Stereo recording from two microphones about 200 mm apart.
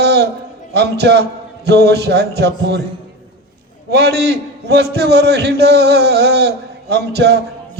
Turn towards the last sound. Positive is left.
turn(degrees=-55)  # may be behind; listen again after turning